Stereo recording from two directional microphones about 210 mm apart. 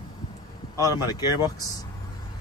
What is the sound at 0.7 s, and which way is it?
Speech, 20° left (ahead or behind).